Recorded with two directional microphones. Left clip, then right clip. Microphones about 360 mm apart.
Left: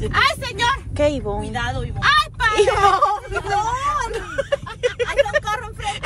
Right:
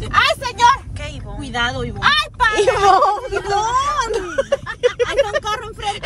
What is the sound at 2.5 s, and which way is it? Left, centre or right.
Speech, centre.